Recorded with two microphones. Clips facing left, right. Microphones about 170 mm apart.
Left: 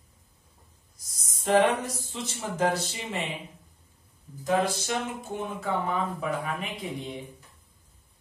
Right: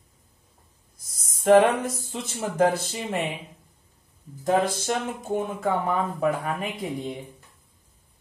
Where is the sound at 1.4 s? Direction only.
50° right (ahead or behind).